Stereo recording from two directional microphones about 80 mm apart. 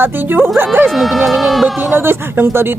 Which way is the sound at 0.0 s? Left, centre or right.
Right.